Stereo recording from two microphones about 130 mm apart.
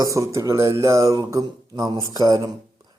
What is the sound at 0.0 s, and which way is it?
A man's voice, 25° right (ahead or behind).